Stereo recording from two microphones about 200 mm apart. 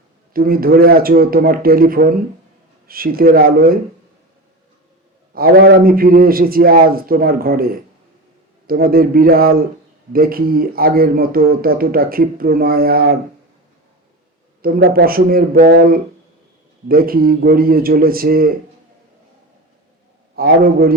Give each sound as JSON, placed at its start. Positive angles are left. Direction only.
{"t": 0.3, "sound": "speech", "side_deg": -45}
{"t": 5.3, "sound": "speech", "side_deg": -50}
{"t": 14.6, "sound": "speech", "side_deg": -50}
{"t": 20.3, "sound": "speech", "side_deg": -50}